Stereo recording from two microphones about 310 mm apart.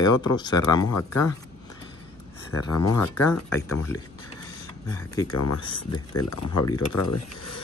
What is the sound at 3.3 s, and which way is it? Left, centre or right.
Speech, left.